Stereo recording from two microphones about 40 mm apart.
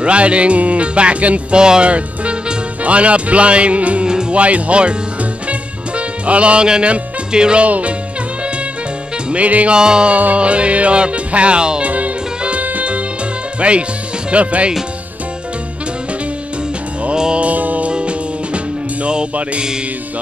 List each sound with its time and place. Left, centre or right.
0.0 s music: right
1.6 s speech: right
4.3 s music: right
7.6 s music: right
9.3 s music: right
9.8 s music: right
10.1 s music: right
11.8 s music: right
13.6 s speech: right
14.3 s music: right
17.0 s music: right
17.5 s music: right
17.9 s music: right